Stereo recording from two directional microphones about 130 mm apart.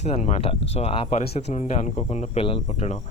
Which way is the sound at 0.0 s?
60° left (ahead or behind).